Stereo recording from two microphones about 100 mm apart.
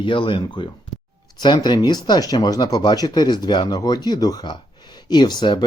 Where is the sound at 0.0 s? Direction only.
55° left (ahead or behind).